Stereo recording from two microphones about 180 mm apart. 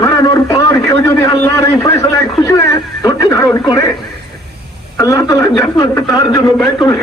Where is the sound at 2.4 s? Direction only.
15° left (ahead or behind).